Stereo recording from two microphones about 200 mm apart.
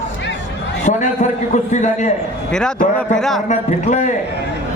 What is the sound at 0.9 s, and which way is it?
A man's voice, 35° left (ahead or behind).